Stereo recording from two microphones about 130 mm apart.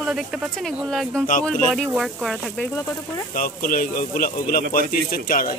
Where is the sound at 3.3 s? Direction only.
90° left.